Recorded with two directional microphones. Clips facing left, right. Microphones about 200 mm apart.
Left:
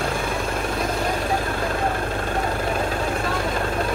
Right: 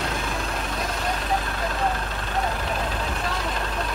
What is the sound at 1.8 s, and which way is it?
Vehicle, 50° left (ahead or behind).